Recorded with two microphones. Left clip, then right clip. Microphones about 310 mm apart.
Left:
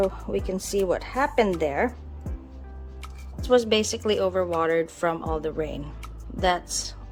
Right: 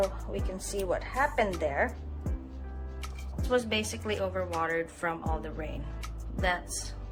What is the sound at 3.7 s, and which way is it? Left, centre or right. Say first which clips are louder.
Speech: left 9 dB; centre.